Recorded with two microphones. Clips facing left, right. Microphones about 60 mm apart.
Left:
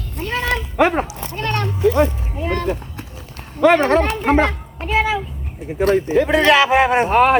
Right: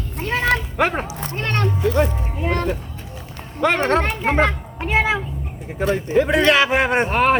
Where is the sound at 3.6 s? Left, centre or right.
Centre.